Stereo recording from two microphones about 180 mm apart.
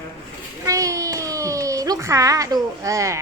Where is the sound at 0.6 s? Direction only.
15° right (ahead or behind).